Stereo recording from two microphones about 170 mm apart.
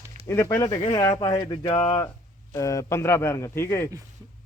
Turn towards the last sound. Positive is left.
turn(degrees=15)  # may be behind; listen again after turning